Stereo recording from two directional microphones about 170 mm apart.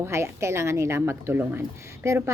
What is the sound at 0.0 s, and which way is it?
A woman's voice, 15° right (ahead or behind).